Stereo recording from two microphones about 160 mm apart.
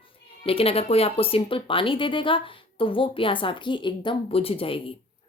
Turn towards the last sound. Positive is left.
turn(degrees=35)  # may be behind; listen again after turning